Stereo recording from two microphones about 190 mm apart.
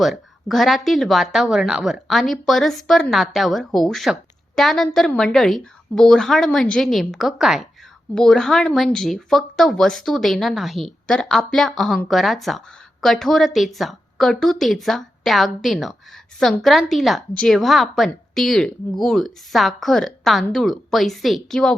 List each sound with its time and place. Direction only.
0.0 s speech: centre (ahead or behind)